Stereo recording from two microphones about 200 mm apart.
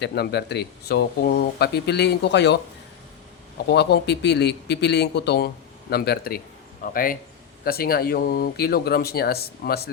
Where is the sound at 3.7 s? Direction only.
55° left (ahead or behind).